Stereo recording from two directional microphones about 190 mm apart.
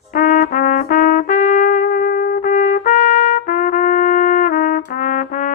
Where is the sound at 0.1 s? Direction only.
45° left (ahead or behind).